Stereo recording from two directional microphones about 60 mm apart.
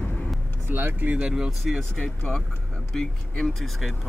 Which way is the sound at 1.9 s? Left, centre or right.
Centre.